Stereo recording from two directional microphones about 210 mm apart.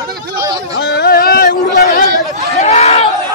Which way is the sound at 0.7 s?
50° left (ahead or behind).